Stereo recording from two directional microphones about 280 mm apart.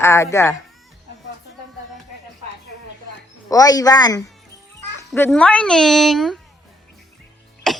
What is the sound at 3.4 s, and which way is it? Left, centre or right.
A woman's voice, centre.